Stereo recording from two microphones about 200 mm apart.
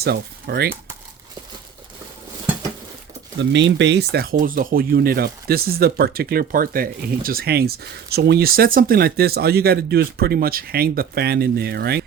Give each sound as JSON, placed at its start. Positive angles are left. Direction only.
{"t": 0.0, "sound": "speech", "side_deg": -55}
{"t": 3.3, "sound": "speech", "side_deg": -65}